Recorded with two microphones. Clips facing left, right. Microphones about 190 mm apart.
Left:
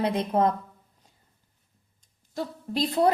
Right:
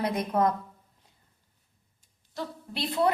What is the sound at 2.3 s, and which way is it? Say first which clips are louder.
Speech: left 6 dB; 40° left (ahead or behind).